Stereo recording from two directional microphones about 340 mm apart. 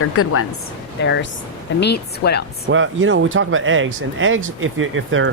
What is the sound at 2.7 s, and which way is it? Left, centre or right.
A man's voice, right.